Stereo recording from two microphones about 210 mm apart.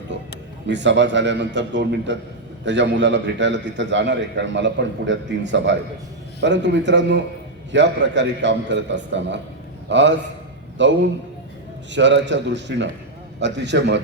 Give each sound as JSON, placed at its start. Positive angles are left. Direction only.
{"t": 0.7, "sound": "a man's voice", "side_deg": -60}